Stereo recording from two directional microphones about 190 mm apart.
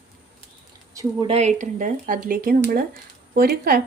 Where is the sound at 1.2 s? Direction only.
35° right (ahead or behind); by 3.8 s 55° right (ahead or behind).